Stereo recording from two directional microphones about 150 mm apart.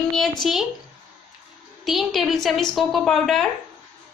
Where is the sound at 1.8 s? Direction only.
Centre (ahead or behind).